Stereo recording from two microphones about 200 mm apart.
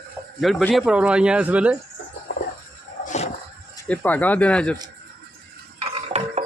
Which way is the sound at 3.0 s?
35° left (ahead or behind).